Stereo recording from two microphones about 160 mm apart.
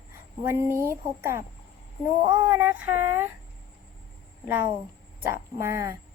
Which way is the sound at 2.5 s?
10° right (ahead or behind).